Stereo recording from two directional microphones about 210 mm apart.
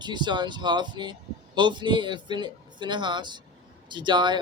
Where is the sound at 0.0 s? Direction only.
20° right (ahead or behind).